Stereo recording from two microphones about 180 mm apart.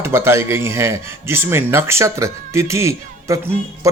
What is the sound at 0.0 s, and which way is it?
Speech, 15° right (ahead or behind).